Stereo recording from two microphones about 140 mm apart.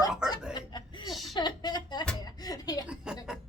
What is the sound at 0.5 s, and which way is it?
Speech, 35° left (ahead or behind).